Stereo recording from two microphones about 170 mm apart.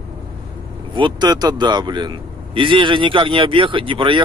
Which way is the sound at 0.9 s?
25° right (ahead or behind).